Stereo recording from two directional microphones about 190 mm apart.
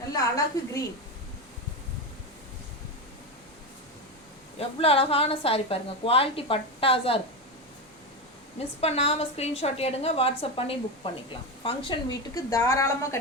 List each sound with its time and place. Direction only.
0.1 s a woman's voice: 15° left (ahead or behind)
4.8 s a woman's voice: 30° left (ahead or behind)
8.8 s a woman's voice: 30° left (ahead or behind); by 13.1 s 15° left (ahead or behind)